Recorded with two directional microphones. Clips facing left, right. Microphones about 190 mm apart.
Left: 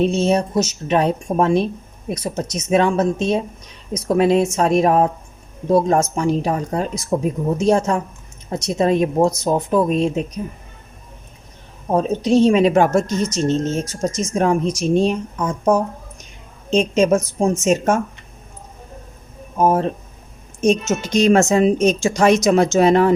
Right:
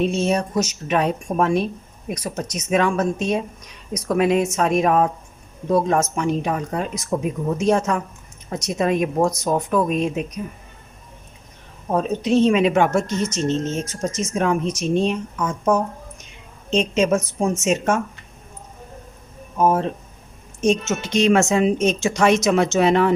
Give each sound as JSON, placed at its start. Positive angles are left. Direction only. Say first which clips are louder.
{"t": 0.0, "sound": "a woman's voice", "louder": "left 3 dB", "side_deg": 30}
{"t": 11.9, "sound": "a woman's voice", "louder": "left 3 dB", "side_deg": 30}
{"t": 16.9, "sound": "a woman's voice", "louder": "left 3 dB", "side_deg": 40}
{"t": 19.6, "sound": "a woman's voice", "louder": "left 2 dB", "side_deg": 40}